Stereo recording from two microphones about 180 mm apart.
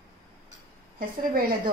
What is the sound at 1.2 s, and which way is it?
Speech, 55° right (ahead or behind).